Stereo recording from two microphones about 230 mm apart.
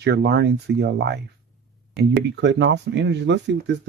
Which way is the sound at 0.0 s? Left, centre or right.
Right.